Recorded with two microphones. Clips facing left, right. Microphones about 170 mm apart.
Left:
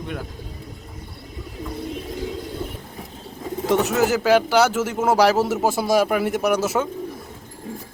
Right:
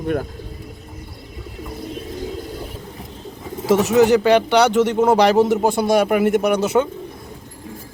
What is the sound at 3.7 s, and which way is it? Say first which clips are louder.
Speech: right 6 dB; centre (ahead or behind).